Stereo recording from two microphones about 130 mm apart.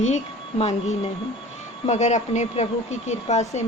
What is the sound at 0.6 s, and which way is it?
Speech, 60° left (ahead or behind).